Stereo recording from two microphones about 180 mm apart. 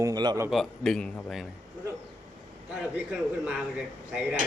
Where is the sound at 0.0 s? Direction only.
20° right (ahead or behind).